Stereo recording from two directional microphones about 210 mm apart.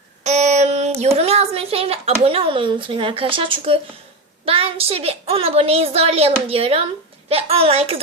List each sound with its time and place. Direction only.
0.3 s speech: 35° right (ahead or behind)